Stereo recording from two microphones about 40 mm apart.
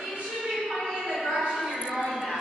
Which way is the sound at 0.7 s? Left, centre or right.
Centre.